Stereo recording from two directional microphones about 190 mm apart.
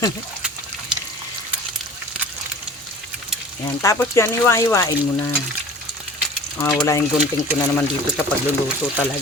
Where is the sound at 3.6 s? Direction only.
15° left (ahead or behind).